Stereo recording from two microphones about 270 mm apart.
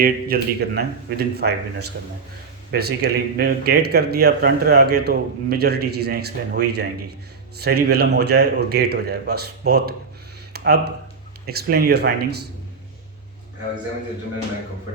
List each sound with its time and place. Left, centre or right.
0.0 s speech: right
2.7 s speech: right